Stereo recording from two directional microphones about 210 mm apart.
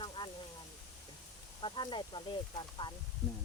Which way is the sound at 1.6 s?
25° left (ahead or behind).